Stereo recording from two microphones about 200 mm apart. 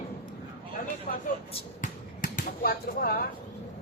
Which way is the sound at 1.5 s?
40° left (ahead or behind).